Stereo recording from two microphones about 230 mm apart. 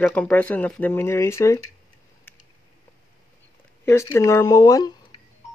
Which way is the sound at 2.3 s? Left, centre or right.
Centre.